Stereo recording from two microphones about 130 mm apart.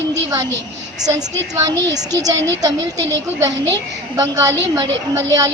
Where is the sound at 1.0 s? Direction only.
30° right (ahead or behind).